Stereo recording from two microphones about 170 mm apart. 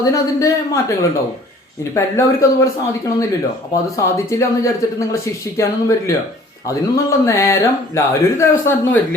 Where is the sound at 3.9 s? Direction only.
15° left (ahead or behind).